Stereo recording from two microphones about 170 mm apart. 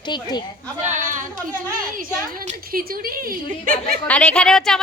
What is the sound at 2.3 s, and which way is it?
Speech, 55° right (ahead or behind).